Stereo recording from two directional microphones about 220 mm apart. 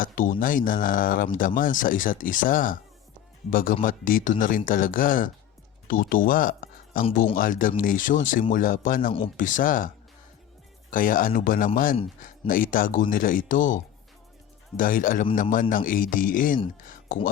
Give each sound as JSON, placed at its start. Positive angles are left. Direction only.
{"t": 0.0, "sound": "speech", "side_deg": 40}
{"t": 10.9, "sound": "speech", "side_deg": 40}
{"t": 16.8, "sound": "a sound", "side_deg": 35}